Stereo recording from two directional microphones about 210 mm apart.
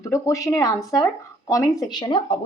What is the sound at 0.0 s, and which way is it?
A woman's voice, 15° left (ahead or behind).